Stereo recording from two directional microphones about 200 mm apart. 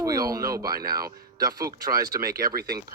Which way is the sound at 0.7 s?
50° right (ahead or behind).